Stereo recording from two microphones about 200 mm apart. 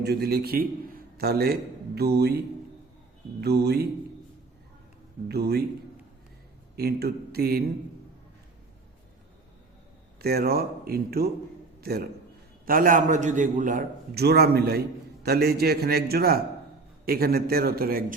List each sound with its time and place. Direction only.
0.0 s a man's voice: 55° right (ahead or behind)
3.4 s a man's voice: 55° right (ahead or behind)
5.3 s a man's voice: 50° right (ahead or behind)
6.7 s a man's voice: 50° right (ahead or behind)
10.2 s a man's voice: 50° right (ahead or behind)